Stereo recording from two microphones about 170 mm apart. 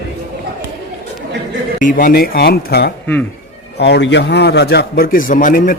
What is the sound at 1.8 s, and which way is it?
A man's voice, 55° left (ahead or behind).